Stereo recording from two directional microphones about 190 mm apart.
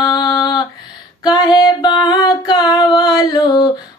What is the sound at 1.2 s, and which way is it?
Female singing, 20° left (ahead or behind).